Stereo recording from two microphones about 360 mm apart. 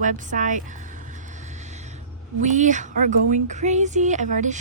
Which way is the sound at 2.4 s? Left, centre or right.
Centre.